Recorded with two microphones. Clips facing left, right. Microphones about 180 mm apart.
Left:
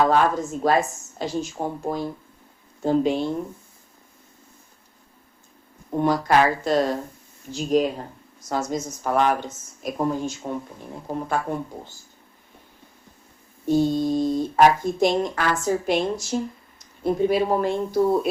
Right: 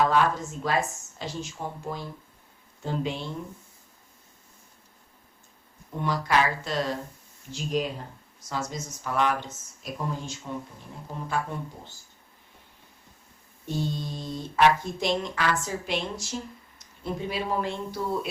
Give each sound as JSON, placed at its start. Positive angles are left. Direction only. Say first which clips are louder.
{"t": 0.0, "sound": "speech", "louder": "left 4 dB", "side_deg": 45}
{"t": 5.9, "sound": "speech", "louder": "left 7 dB", "side_deg": 45}
{"t": 13.7, "sound": "speech", "louder": "left 11 dB", "side_deg": 45}